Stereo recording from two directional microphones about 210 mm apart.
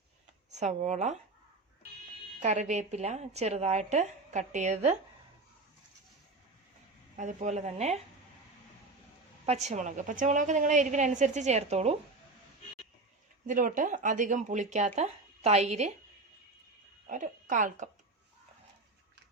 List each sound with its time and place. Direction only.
0.5 s a woman's voice: 30° right (ahead or behind)
2.4 s a woman's voice: 35° right (ahead or behind)
7.2 s a woman's voice: 35° right (ahead or behind)
9.5 s a woman's voice: 35° right (ahead or behind)
13.5 s a woman's voice: 40° right (ahead or behind)
17.1 s a woman's voice: 40° right (ahead or behind)